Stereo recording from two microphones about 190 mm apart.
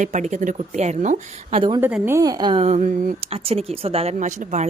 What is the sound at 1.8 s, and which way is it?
Speech, 10° right (ahead or behind).